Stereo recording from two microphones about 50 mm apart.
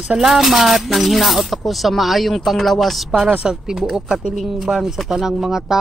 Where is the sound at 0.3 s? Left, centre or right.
Centre.